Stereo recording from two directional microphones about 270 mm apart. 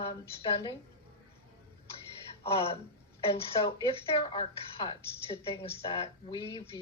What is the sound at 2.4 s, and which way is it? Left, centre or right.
Speech, left.